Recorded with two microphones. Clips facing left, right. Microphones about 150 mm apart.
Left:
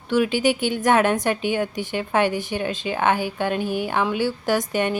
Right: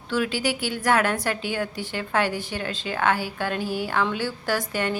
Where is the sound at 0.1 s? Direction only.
20° left (ahead or behind).